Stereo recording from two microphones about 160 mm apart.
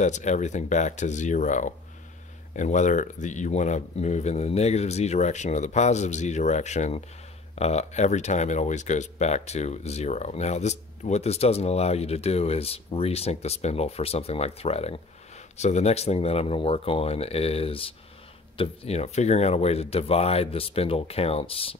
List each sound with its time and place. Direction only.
0.0 s speech: 50° left (ahead or behind)